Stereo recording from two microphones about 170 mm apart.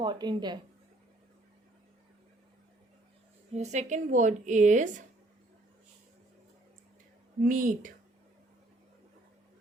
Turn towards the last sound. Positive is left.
turn(degrees=-50)  # may be behind; listen again after turning